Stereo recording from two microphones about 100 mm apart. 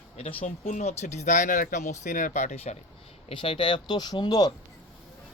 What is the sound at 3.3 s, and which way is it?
Speech, 60° left (ahead or behind).